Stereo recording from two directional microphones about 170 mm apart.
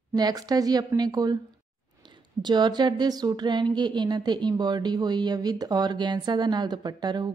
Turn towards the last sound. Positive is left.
turn(degrees=-25)  # may be behind; listen again after turning